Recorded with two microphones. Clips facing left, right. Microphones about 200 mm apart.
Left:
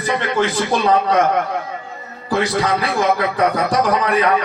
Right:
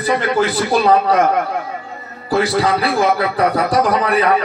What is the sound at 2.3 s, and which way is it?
A man's voice, 35° right (ahead or behind).